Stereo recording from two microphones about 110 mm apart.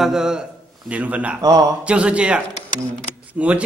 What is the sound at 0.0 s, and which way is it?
A man's voice, 5° right (ahead or behind).